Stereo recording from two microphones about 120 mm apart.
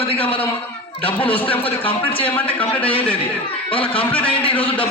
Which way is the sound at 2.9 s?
50° left (ahead or behind).